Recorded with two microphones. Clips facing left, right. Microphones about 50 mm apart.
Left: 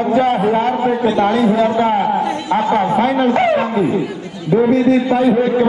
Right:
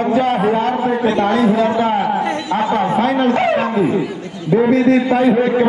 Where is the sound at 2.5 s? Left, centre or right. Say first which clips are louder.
Left 2 dB; left.